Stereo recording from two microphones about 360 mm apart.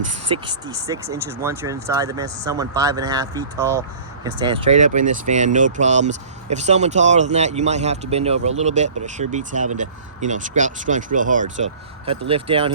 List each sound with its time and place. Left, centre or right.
0.3 s speech: centre